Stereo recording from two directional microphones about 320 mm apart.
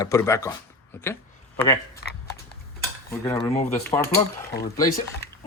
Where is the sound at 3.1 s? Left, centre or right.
Centre.